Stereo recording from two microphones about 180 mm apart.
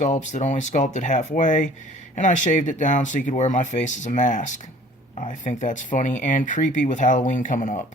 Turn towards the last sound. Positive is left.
turn(degrees=45)  # may be behind; listen again after turning